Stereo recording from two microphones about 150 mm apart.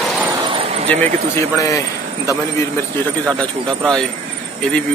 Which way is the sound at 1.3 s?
20° left (ahead or behind).